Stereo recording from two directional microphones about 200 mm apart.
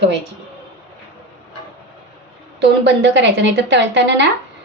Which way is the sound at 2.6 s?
60° right (ahead or behind).